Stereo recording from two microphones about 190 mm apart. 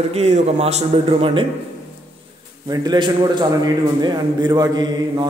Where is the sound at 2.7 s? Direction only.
25° right (ahead or behind).